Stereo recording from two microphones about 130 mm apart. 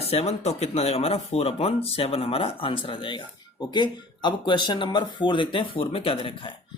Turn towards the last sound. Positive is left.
turn(degrees=45)  # may be behind; listen again after turning